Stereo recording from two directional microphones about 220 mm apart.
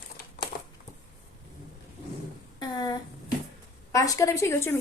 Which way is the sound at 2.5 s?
20° left (ahead or behind).